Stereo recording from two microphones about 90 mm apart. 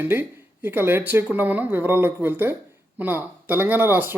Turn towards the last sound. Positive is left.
turn(degrees=-25)  # may be behind; listen again after turning